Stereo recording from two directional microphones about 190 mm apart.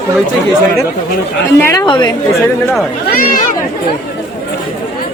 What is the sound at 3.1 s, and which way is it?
Speech, 50° left (ahead or behind).